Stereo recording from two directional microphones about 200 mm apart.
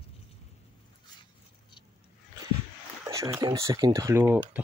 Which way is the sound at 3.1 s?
15° right (ahead or behind).